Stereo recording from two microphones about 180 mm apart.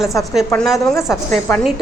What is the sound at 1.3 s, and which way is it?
Speech, 10° left (ahead or behind).